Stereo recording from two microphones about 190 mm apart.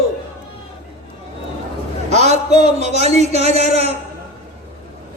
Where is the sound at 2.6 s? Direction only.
35° right (ahead or behind).